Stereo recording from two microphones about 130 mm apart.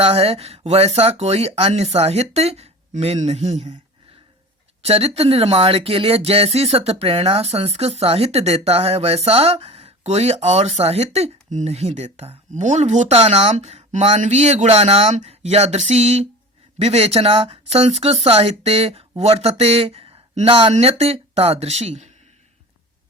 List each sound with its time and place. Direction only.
0.0 s speech: 50° right (ahead or behind)
4.8 s speech: 50° right (ahead or behind)